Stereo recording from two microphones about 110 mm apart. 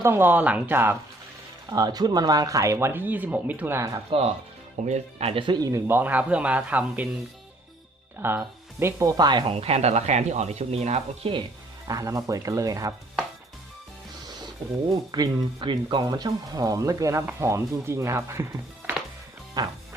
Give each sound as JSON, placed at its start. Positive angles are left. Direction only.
{"t": 0.0, "sound": "a man's voice", "side_deg": -20}
{"t": 1.7, "sound": "speech", "side_deg": -35}
{"t": 3.8, "sound": "speech", "side_deg": -30}
{"t": 4.9, "sound": "speech", "side_deg": -70}
{"t": 5.4, "sound": "a man's voice", "side_deg": -45}
{"t": 5.6, "sound": "speech", "side_deg": -30}
{"t": 6.0, "sound": "a man's voice", "side_deg": -15}
{"t": 8.2, "sound": "speech", "side_deg": -20}
{"t": 9.1, "sound": "speech", "side_deg": -40}
{"t": 9.5, "sound": "speech", "side_deg": -65}
{"t": 11.9, "sound": "speech", "side_deg": -30}
{"t": 14.3, "sound": "speech", "side_deg": -40}
{"t": 19.6, "sound": "speech", "side_deg": -35}